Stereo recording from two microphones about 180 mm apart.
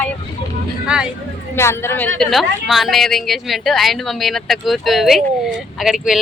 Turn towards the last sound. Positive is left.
turn(degrees=-5)  # may be behind; listen again after turning